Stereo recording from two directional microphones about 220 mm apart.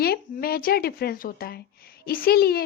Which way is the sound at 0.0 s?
45° left (ahead or behind).